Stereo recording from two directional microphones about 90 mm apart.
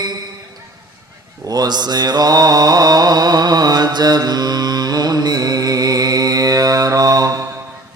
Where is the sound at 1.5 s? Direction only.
50° right (ahead or behind).